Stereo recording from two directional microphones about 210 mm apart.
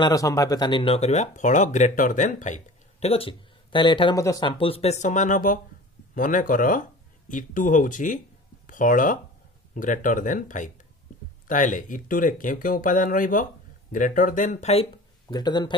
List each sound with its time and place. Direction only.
0.0 s speech: 15° left (ahead or behind)